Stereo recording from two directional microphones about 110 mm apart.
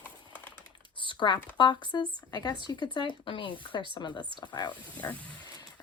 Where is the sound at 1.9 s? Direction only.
40° left (ahead or behind).